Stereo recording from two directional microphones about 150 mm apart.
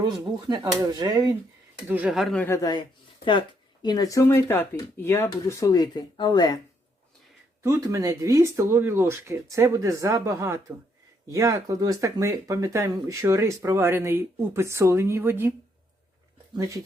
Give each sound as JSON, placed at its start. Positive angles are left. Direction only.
{"t": 0.4, "sound": "speech", "side_deg": -25}
{"t": 1.9, "sound": "speech", "side_deg": -10}
{"t": 2.4, "sound": "speech", "side_deg": 20}
{"t": 3.8, "sound": "speech", "side_deg": 25}
{"t": 7.6, "sound": "speech", "side_deg": -20}
{"t": 16.6, "sound": "speech", "side_deg": -25}